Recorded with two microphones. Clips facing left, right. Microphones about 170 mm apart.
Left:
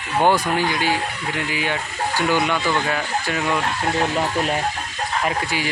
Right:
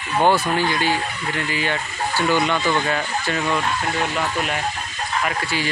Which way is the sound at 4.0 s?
30° left (ahead or behind).